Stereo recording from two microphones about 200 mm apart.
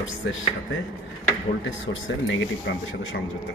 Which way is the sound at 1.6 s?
75° left (ahead or behind).